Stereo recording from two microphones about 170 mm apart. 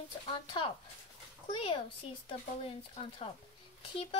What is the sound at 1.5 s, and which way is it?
Speech, 35° left (ahead or behind).